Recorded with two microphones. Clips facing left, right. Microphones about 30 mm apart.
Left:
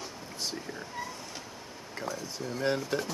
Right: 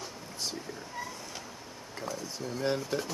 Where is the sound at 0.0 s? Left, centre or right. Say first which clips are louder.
Left 1 dB; centre.